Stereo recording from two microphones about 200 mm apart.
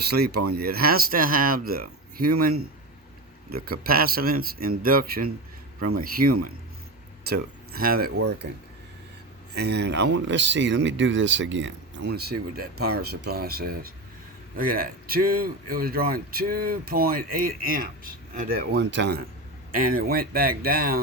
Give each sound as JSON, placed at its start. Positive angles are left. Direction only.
{"t": 0.0, "sound": "speech", "side_deg": -55}
{"t": 3.5, "sound": "speech", "side_deg": -50}
{"t": 8.1, "sound": "speech", "side_deg": -90}
{"t": 9.6, "sound": "speech", "side_deg": -55}
{"t": 19.7, "sound": "speech", "side_deg": -45}